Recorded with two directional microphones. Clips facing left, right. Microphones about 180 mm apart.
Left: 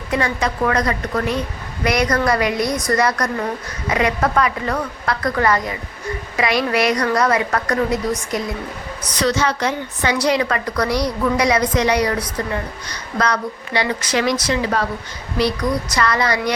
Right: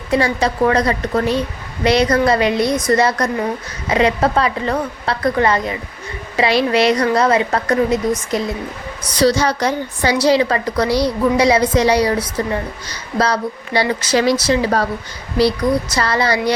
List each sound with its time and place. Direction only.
0.1 s a woman's voice: 30° right (ahead or behind)